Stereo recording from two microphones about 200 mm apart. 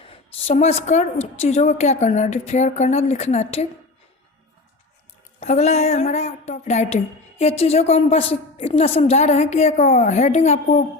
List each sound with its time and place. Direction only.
0.0 s a woman's voice: 30° left (ahead or behind)
5.4 s a woman's voice: 35° left (ahead or behind)